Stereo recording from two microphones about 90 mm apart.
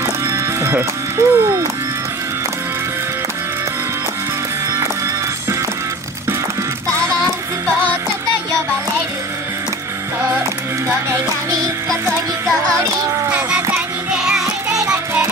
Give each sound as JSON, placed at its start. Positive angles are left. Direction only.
{"t": 0.3, "sound": "music", "side_deg": -30}